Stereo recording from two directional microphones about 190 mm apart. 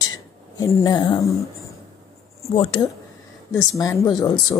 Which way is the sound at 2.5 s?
25° left (ahead or behind).